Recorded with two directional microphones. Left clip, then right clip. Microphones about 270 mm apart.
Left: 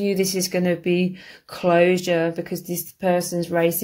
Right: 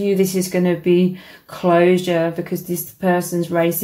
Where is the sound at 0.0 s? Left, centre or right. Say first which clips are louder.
Right 4 dB; left.